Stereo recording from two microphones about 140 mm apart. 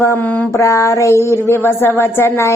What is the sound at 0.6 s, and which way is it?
Mantra, 20° left (ahead or behind).